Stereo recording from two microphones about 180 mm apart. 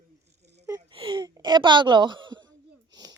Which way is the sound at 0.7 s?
30° right (ahead or behind).